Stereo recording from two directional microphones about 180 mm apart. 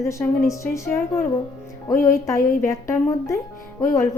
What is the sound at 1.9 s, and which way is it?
Music, 50° left (ahead or behind).